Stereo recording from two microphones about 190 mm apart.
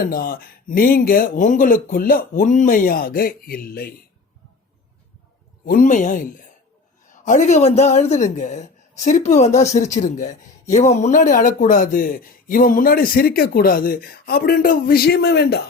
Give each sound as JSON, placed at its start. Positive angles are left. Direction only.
{"t": 0.0, "sound": "speech", "side_deg": 50}
{"t": 5.6, "sound": "a man's voice", "side_deg": 45}